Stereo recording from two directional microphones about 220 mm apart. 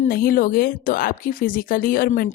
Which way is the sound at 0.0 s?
40° left (ahead or behind).